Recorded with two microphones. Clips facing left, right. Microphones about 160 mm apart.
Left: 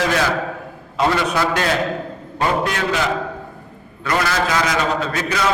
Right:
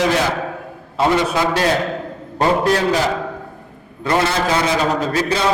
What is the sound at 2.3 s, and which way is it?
Speech, 35° right (ahead or behind).